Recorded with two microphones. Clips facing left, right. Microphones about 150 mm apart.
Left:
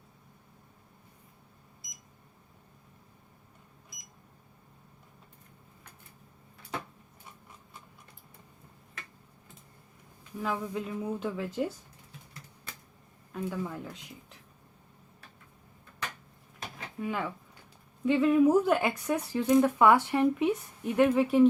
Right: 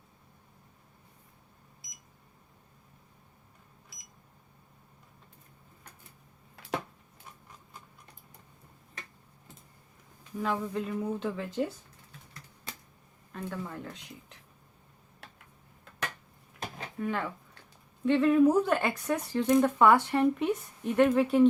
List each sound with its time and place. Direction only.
10.4 s speech: 5° left (ahead or behind)
13.3 s speech: 10° left (ahead or behind)
17.0 s speech: 5° left (ahead or behind)